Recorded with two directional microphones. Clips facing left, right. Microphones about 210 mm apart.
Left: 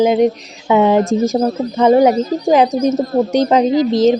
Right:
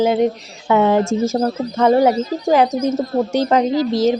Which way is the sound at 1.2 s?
15° left (ahead or behind).